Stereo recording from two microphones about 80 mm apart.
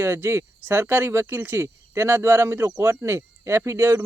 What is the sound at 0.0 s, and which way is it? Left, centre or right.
Speech, right.